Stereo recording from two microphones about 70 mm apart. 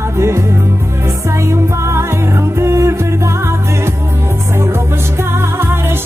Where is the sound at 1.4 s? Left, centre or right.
Right.